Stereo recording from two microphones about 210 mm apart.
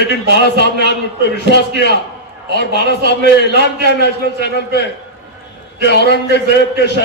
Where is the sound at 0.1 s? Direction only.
55° left (ahead or behind).